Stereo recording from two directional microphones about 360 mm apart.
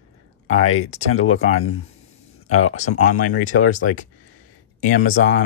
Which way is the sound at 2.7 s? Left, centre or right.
Centre.